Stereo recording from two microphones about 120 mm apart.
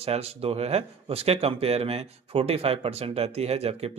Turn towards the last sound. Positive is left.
turn(degrees=-55)  # may be behind; listen again after turning